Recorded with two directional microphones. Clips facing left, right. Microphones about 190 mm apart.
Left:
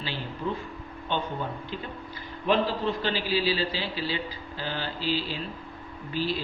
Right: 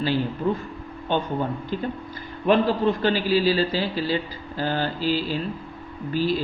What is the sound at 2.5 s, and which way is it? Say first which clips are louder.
A man's voice: right 6 dB; 50° right (ahead or behind).